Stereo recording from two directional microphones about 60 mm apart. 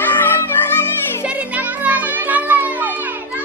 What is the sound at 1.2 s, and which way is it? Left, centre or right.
Music, right.